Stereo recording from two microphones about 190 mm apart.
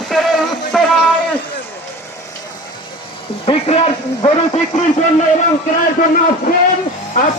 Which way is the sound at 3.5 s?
30° left (ahead or behind).